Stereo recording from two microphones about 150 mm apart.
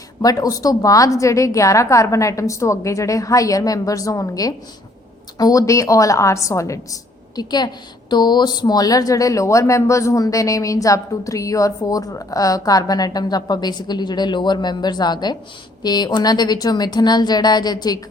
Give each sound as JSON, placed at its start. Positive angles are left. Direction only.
{"t": 0.2, "sound": "a woman's voice", "side_deg": 25}